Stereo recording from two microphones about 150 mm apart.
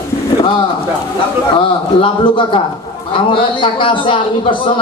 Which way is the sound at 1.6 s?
35° left (ahead or behind).